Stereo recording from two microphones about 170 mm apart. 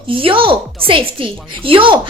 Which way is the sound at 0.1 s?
30° right (ahead or behind).